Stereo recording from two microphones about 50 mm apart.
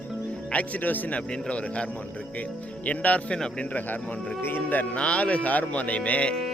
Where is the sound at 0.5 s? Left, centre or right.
Left.